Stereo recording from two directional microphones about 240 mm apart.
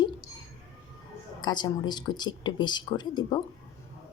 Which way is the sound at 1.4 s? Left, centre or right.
Centre.